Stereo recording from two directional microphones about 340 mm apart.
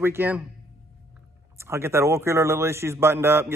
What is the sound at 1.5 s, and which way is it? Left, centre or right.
Speech, centre.